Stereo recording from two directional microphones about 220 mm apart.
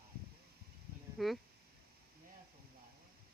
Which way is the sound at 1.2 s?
Centre (ahead or behind).